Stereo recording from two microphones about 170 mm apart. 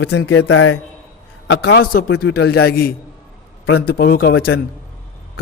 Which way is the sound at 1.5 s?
75° left (ahead or behind).